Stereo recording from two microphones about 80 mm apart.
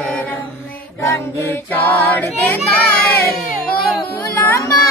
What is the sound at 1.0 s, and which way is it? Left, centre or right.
Music, left.